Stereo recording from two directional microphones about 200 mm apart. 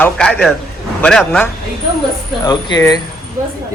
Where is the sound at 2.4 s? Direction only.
20° left (ahead or behind).